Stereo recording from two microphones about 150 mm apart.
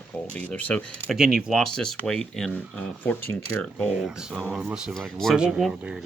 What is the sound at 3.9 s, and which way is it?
Speech, 5° right (ahead or behind).